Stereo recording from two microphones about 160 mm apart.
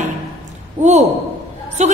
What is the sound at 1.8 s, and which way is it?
Speech, 45° right (ahead or behind).